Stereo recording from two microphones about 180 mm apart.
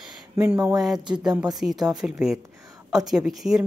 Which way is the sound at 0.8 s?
Centre (ahead or behind).